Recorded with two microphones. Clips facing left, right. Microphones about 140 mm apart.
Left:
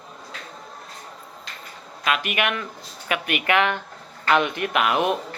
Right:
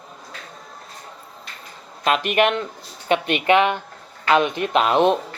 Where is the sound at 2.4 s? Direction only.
35° right (ahead or behind).